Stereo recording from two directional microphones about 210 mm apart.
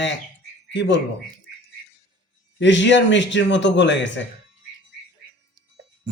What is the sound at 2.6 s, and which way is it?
A man's voice, 60° left (ahead or behind).